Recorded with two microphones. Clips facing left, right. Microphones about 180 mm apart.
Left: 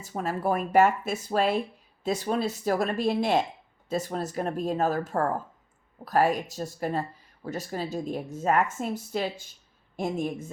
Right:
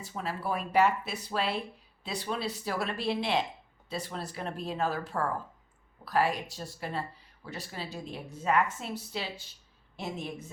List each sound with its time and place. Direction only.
0.0 s a woman's voice: 45° left (ahead or behind)